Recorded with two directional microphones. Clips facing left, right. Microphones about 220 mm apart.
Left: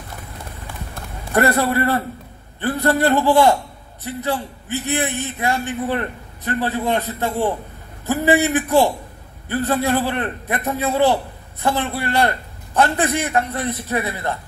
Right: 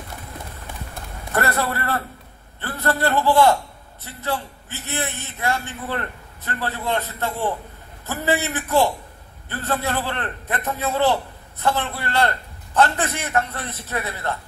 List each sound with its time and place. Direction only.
1.3 s a man's voice: 15° left (ahead or behind)